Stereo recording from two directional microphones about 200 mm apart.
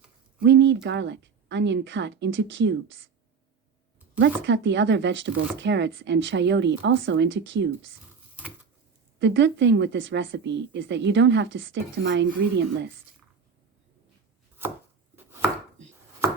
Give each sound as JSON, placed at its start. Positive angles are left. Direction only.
{"t": 0.4, "sound": "a woman's voice", "side_deg": -60}
{"t": 4.4, "sound": "a woman's voice", "side_deg": -65}
{"t": 9.1, "sound": "a woman's voice", "side_deg": -65}
{"t": 15.1, "sound": "chopping", "side_deg": -10}